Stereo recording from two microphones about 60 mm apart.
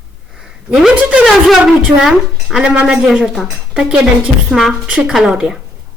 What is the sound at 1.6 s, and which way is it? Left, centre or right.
A woman's voice, centre.